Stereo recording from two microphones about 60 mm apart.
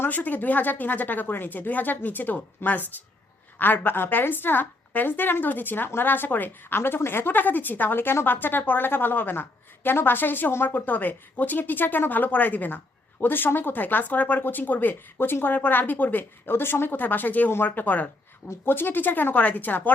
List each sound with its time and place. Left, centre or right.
0.0 s a woman's voice: left